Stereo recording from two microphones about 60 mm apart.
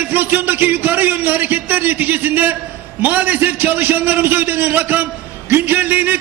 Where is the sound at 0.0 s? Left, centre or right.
Right.